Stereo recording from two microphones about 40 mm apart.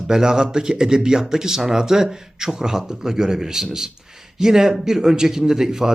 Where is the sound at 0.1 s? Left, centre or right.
Centre.